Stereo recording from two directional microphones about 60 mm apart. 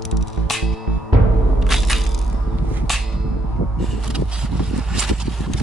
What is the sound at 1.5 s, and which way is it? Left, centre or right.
Music, centre.